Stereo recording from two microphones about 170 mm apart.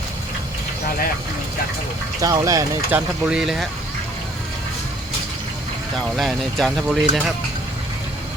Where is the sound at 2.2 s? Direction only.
20° right (ahead or behind).